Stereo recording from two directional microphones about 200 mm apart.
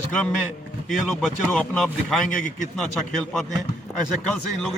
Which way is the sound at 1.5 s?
5° left (ahead or behind).